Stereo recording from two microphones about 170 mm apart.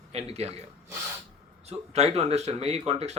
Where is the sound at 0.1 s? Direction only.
40° right (ahead or behind).